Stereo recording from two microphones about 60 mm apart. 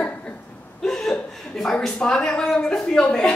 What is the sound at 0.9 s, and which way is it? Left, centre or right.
A woman's voice, centre.